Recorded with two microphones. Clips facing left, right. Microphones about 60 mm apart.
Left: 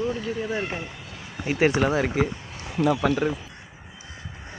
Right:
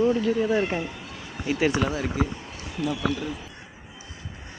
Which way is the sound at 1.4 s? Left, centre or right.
Left.